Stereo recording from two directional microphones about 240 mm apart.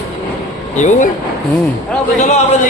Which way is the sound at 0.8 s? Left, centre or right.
Left.